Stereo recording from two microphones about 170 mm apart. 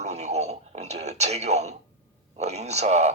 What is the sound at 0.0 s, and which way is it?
Radio, 40° right (ahead or behind).